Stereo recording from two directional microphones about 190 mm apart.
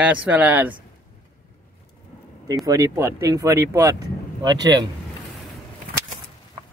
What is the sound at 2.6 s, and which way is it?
Speech, 15° right (ahead or behind).